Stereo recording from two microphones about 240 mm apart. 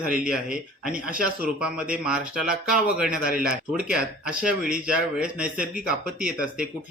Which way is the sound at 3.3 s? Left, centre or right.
Right.